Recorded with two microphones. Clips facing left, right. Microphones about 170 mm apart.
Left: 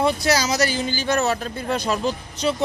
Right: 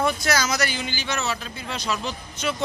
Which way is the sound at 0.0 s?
35° left (ahead or behind).